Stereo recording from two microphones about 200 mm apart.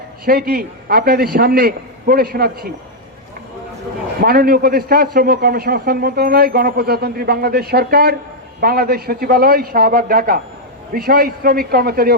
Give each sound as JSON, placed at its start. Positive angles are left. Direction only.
{"t": 0.3, "sound": "a man's voice", "side_deg": -50}
{"t": 4.2, "sound": "a man's voice", "side_deg": -50}